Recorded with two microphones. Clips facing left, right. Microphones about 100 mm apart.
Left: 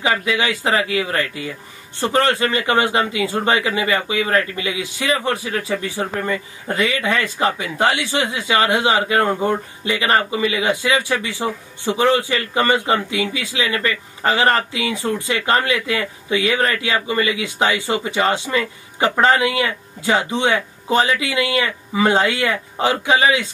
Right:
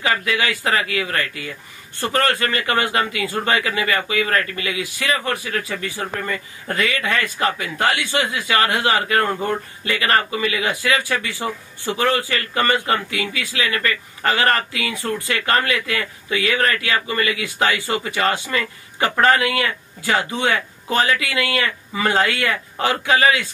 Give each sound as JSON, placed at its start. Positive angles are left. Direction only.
{"t": 0.0, "sound": "a man's voice", "side_deg": 20}